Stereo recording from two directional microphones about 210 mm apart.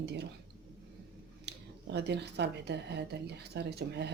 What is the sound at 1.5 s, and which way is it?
Speech, 55° right (ahead or behind).